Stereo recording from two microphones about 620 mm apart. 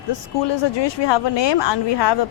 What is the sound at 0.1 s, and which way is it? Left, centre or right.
Speech, left.